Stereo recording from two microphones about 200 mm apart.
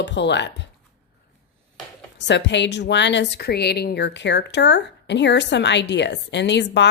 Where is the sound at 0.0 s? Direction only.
60° left (ahead or behind).